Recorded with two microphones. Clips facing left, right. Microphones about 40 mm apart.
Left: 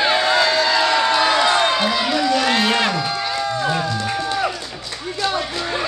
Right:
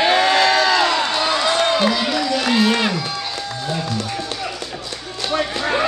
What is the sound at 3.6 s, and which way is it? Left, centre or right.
Speech, left.